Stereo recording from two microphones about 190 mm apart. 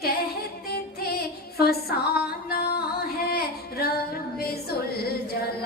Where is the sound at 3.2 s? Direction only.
55° left (ahead or behind).